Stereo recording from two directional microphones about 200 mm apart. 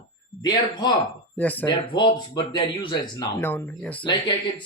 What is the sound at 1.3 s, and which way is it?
Speech, 10° left (ahead or behind).